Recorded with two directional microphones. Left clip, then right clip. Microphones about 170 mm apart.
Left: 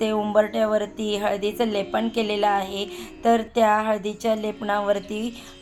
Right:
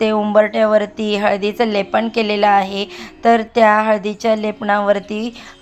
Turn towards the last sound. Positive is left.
turn(degrees=-10)  # may be behind; listen again after turning